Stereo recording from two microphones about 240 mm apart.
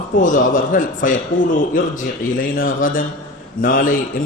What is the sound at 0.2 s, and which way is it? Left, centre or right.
A man's voice, left.